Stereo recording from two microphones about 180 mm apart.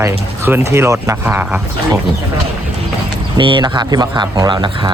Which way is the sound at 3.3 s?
25° right (ahead or behind).